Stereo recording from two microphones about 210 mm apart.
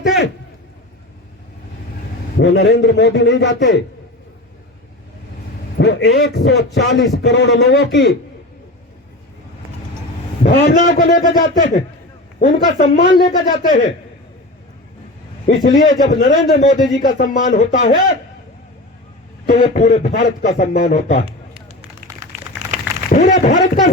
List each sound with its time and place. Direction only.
2.4 s a man's voice: 55° left (ahead or behind)
5.7 s a man's voice: 55° left (ahead or behind)
10.4 s a man's voice: 40° left (ahead or behind)
15.4 s a man's voice: 35° left (ahead or behind)
19.5 s a man's voice: 35° left (ahead or behind)
21.2 s a sound: 25° right (ahead or behind)
23.1 s a man's voice: 35° left (ahead or behind)